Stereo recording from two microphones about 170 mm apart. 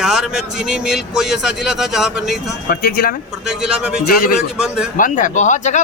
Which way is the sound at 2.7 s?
65° left (ahead or behind).